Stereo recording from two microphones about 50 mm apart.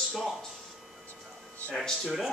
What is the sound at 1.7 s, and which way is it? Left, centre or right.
Speech, centre.